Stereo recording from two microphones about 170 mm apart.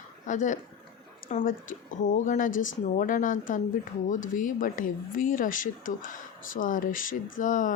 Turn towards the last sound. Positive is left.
turn(degrees=50)  # may be behind; listen again after turning